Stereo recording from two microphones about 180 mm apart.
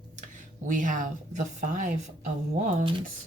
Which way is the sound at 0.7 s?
45° right (ahead or behind).